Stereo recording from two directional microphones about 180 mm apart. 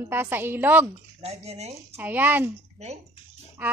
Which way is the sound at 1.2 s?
35° right (ahead or behind).